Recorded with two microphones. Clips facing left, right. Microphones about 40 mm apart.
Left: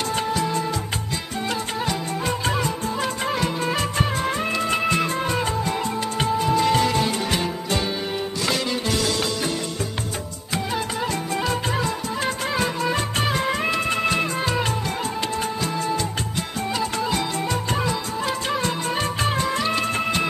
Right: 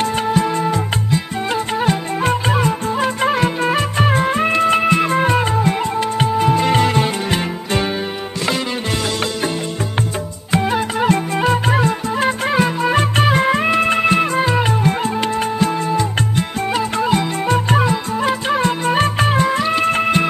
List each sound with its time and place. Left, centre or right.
0.3 s music: right
1.9 s music: right
10.5 s music: right
16.3 s music: right